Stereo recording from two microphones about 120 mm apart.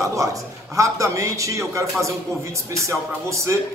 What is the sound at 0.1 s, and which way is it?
A man's voice, 25° right (ahead or behind).